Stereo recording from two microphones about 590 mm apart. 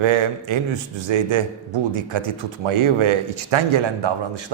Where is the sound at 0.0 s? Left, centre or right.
Right.